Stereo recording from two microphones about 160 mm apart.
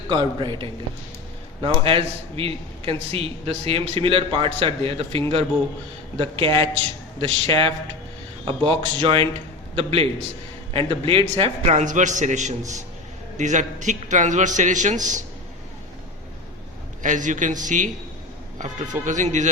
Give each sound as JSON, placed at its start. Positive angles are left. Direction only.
{"t": 0.1, "sound": "a man's voice", "side_deg": -30}
{"t": 17.0, "sound": "a man's voice", "side_deg": -50}